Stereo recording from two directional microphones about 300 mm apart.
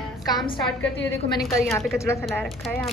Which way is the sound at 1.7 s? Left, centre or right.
Centre.